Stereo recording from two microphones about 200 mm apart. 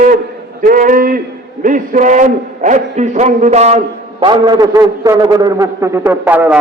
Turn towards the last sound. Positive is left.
turn(degrees=-5)  # may be behind; listen again after turning